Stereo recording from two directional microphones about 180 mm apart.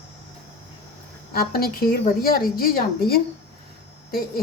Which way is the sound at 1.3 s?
55° left (ahead or behind).